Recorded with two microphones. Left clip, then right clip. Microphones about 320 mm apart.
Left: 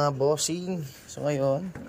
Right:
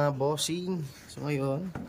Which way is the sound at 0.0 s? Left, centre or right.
Centre.